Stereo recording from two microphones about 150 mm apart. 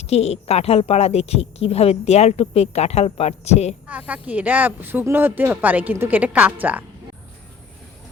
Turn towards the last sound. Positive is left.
turn(degrees=-10)  # may be behind; listen again after turning